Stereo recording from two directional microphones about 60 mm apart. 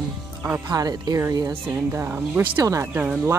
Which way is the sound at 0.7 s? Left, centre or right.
Right.